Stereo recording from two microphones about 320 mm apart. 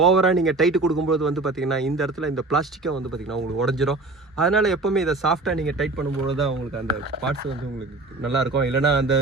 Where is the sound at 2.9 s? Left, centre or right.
Right.